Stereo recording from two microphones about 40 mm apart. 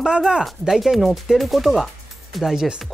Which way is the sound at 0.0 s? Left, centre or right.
Centre.